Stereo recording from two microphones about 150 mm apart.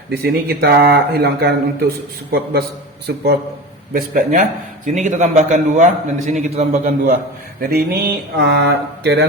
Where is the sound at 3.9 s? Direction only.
65° right (ahead or behind).